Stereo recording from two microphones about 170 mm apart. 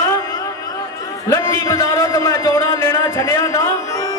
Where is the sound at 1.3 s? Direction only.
20° left (ahead or behind).